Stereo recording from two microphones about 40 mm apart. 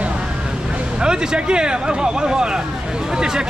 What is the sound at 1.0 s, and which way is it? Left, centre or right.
Speech, centre.